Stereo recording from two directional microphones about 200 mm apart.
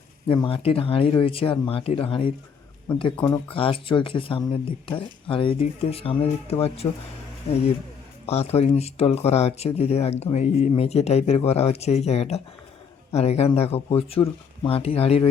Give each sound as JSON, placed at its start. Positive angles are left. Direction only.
{"t": 0.3, "sound": "speech", "side_deg": 25}
{"t": 3.5, "sound": "speech", "side_deg": 25}
{"t": 8.3, "sound": "speech", "side_deg": 30}